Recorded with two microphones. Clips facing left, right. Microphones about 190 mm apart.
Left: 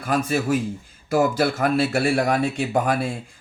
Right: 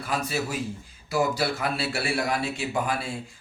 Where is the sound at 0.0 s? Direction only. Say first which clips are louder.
Left 6 dB; 50° left (ahead or behind).